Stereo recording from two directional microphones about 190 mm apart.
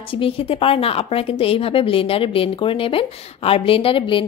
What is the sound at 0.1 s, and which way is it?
A woman's voice, 30° left (ahead or behind).